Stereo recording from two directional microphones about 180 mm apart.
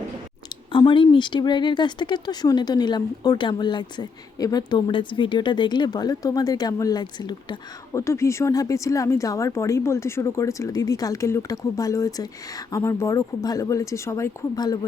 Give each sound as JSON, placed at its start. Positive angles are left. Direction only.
{"t": 0.7, "sound": "speech", "side_deg": 25}